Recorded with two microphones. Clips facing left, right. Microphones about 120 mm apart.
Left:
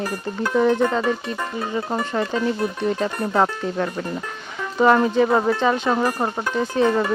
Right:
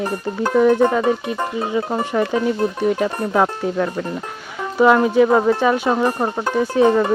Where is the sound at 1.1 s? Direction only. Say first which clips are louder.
Right 4 dB; 15° right (ahead or behind).